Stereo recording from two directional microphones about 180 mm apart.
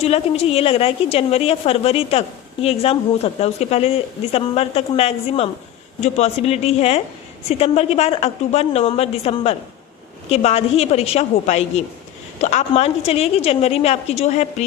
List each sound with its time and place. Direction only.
0.0 s a woman's voice: 35° left (ahead or behind)